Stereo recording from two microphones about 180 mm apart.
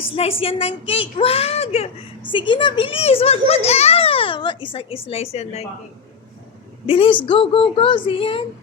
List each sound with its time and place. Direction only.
0.2 s a woman's voice: 30° left (ahead or behind)
6.8 s a woman's voice: 30° left (ahead or behind)